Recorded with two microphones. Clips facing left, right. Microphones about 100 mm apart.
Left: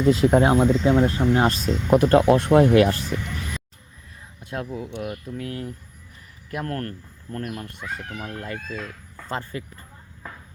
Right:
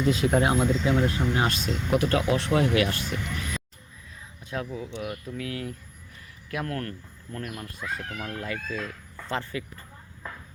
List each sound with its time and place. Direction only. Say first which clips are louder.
0.0 s speech: left 6 dB; 30° left (ahead or behind)
4.4 s speech: left 2 dB; 50° left (ahead or behind)
5.3 s speech: left 2 dB; 35° left (ahead or behind)
7.8 s speech: left 1 dB; centre (ahead or behind)
9.3 s speech: left 1 dB; 40° left (ahead or behind)